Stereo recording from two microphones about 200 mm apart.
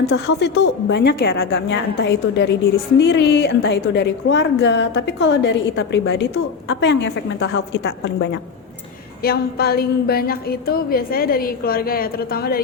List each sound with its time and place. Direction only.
0.1 s a woman's voice: 60° left (ahead or behind)